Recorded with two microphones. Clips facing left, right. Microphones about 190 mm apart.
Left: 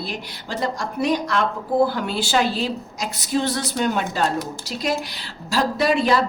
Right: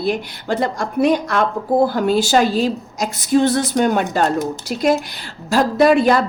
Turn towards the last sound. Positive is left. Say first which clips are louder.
# right 6 dB
turn(degrees=-50)  # may be behind; listen again after turning